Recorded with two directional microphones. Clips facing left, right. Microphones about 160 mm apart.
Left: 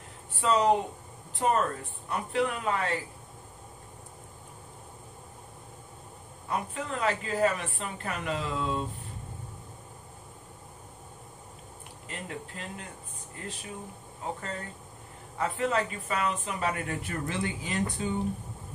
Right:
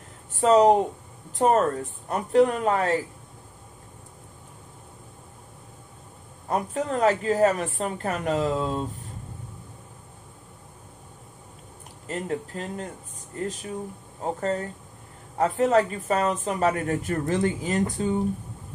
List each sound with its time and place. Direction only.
0.4 s a woman's voice: 40° right (ahead or behind)
6.5 s a woman's voice: 40° right (ahead or behind)
12.1 s a woman's voice: 40° right (ahead or behind)
14.2 s a woman's voice: 40° right (ahead or behind)